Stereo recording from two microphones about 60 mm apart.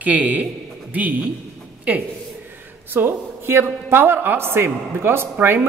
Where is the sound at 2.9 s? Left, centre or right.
Right.